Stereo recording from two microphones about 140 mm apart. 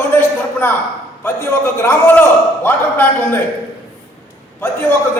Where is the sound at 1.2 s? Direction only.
20° left (ahead or behind).